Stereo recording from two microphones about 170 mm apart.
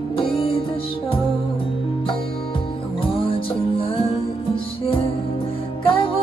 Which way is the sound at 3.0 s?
35° left (ahead or behind).